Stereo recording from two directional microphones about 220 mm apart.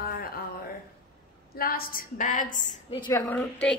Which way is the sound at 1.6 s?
40° left (ahead or behind).